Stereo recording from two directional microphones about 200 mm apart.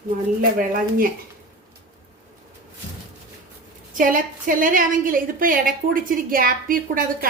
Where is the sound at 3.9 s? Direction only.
45° right (ahead or behind).